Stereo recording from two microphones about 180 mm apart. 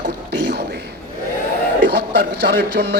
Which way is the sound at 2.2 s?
65° right (ahead or behind).